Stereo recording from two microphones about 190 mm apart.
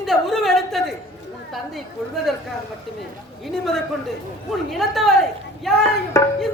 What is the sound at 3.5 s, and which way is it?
A man's voice, centre (ahead or behind).